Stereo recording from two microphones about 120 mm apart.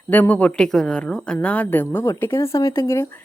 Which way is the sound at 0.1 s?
15° left (ahead or behind).